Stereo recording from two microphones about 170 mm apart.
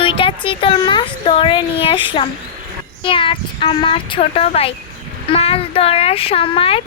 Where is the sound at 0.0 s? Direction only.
30° left (ahead or behind).